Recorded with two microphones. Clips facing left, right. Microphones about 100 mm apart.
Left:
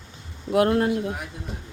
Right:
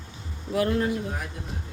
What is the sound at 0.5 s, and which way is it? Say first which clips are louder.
Speech: left 5 dB; 60° left (ahead or behind).